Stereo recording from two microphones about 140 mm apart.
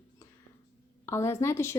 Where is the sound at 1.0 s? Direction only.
20° left (ahead or behind).